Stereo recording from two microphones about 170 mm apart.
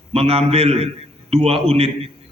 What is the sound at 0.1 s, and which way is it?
A man's voice, 35° right (ahead or behind).